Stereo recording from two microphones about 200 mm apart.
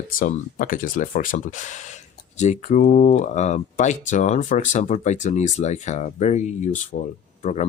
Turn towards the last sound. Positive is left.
turn(degrees=35)  # may be behind; listen again after turning